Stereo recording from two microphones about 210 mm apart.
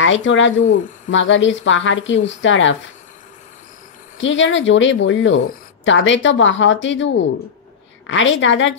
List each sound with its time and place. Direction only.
0.0 s speech: 65° left (ahead or behind)
4.2 s speech: 65° left (ahead or behind)